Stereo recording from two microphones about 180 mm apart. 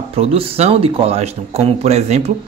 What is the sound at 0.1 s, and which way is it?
A woman's voice, 30° right (ahead or behind).